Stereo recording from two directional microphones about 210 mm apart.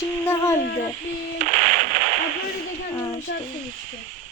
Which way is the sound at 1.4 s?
35° right (ahead or behind).